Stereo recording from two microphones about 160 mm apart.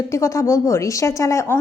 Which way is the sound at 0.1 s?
20° left (ahead or behind).